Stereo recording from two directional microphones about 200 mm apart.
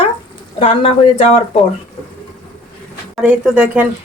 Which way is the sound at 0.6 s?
30° left (ahead or behind).